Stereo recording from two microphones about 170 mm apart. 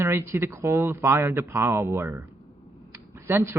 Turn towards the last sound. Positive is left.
turn(degrees=-15)  # may be behind; listen again after turning